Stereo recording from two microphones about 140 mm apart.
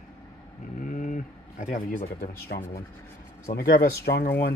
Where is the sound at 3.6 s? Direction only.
90° left.